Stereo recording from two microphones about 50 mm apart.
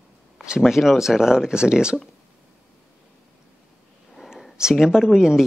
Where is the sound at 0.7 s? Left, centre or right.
Centre.